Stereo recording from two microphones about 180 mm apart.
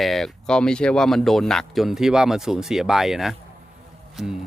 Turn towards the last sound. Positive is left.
turn(degrees=-5)  # may be behind; listen again after turning